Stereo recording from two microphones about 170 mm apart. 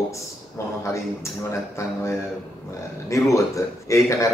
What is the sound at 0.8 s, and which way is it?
Speech, 15° left (ahead or behind).